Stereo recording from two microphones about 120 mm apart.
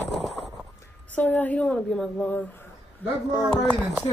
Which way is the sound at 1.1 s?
15° left (ahead or behind).